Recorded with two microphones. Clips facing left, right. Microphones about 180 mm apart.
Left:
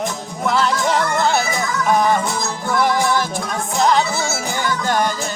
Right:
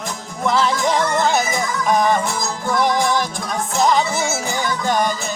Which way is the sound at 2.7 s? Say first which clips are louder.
Even; 15° right (ahead or behind).